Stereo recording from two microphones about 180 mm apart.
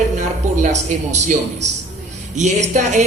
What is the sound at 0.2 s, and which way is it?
A woman's voice, 40° right (ahead or behind).